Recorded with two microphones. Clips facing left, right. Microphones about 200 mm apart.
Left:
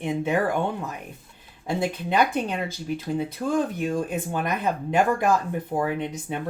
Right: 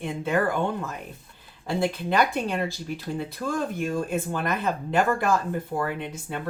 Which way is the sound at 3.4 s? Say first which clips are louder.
Left 2 dB; 15° left (ahead or behind).